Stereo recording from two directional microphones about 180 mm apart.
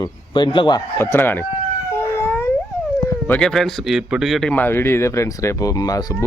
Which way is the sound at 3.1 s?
10° left (ahead or behind).